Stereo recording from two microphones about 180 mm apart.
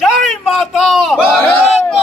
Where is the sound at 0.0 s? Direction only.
Centre (ahead or behind).